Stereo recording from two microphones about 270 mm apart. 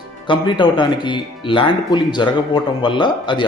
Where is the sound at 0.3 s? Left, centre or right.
Centre.